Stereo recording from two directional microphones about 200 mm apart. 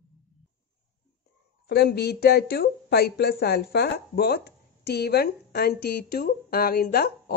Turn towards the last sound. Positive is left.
turn(degrees=50)  # may be behind; listen again after turning